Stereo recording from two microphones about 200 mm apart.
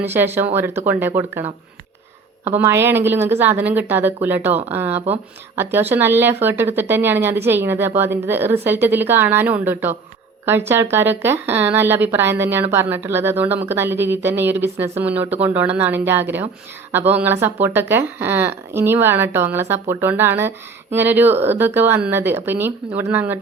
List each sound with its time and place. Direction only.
0.0 s speech: 10° right (ahead or behind)
2.6 s speech: 10° right (ahead or behind)